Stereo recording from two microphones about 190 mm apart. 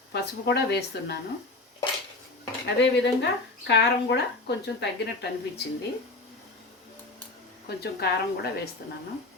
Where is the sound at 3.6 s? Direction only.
65° left (ahead or behind).